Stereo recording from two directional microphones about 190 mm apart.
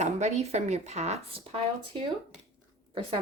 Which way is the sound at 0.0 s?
35° right (ahead or behind).